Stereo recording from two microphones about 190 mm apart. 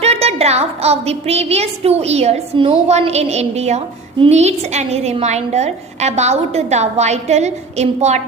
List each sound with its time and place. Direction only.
0.0 s a woman's voice: 35° right (ahead or behind)